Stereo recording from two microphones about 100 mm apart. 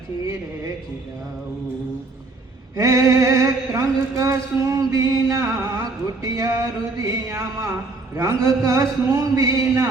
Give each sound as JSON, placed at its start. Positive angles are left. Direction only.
{"t": 2.7, "sound": "mantra", "side_deg": -35}